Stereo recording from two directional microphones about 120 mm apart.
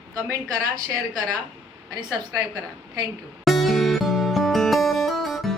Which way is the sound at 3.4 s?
Centre (ahead or behind).